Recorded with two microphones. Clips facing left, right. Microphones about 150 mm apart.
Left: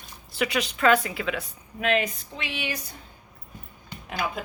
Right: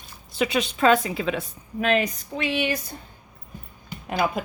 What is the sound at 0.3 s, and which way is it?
A woman's voice, 20° right (ahead or behind).